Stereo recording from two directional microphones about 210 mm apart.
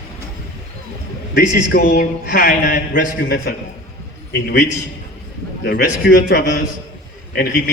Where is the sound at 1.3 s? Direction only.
50° left (ahead or behind).